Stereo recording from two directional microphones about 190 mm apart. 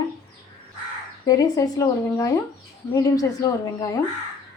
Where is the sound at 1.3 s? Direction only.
20° left (ahead or behind).